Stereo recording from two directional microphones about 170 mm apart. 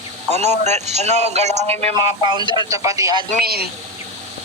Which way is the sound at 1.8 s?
25° right (ahead or behind).